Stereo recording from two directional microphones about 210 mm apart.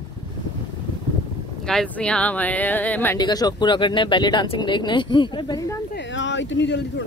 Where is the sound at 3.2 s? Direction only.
20° left (ahead or behind).